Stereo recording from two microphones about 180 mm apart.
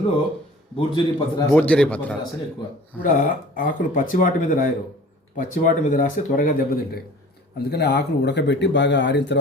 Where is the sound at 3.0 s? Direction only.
50° left (ahead or behind).